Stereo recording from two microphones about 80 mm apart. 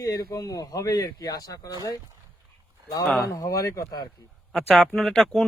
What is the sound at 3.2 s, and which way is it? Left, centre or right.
Speech, left.